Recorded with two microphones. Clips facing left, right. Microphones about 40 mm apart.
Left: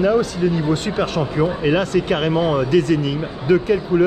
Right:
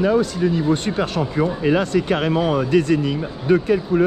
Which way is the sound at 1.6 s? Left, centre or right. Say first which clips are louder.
Right 1 dB; left.